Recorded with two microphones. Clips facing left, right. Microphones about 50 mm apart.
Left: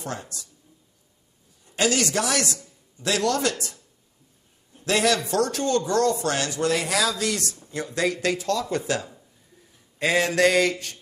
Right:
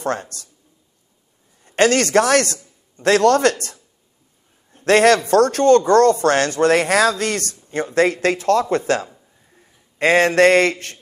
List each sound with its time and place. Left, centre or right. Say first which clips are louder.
0.0 s speech: right 10 dB; right
1.6 s a man's voice: right 8 dB; right
4.7 s a man's voice: right 9 dB; right